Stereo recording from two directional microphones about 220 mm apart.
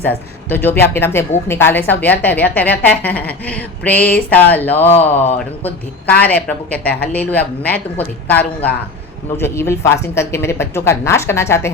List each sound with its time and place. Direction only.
0.4 s a woman's voice: 10° left (ahead or behind)